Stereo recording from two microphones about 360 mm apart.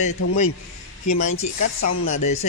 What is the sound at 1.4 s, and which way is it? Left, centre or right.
Speech, left.